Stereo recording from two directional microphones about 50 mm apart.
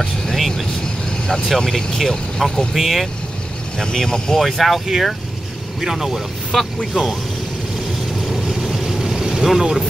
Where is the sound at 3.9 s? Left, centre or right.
Centre.